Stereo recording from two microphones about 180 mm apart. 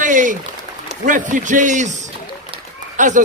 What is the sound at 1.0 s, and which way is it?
Speech, 45° right (ahead or behind).